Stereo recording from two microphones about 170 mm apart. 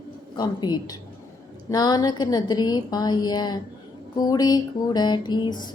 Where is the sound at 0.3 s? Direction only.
25° left (ahead or behind).